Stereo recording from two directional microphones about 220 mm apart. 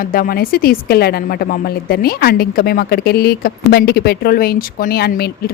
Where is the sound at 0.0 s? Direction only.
40° left (ahead or behind).